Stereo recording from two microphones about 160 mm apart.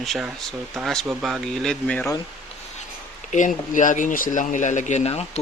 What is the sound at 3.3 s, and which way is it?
Speech, 50° left (ahead or behind).